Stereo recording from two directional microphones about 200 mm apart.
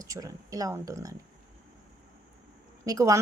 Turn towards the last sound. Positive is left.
turn(degrees=-15)  # may be behind; listen again after turning